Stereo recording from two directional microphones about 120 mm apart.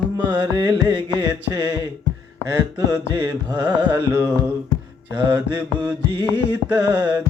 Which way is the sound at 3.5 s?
15° right (ahead or behind).